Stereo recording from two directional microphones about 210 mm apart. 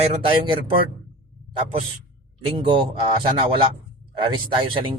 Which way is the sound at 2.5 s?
25° right (ahead or behind).